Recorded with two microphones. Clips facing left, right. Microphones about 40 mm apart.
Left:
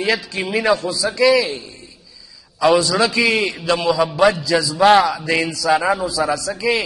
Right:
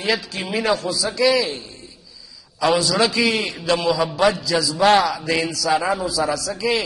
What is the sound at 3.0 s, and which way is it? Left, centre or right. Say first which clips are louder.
A man's voice: left 2 dB; left.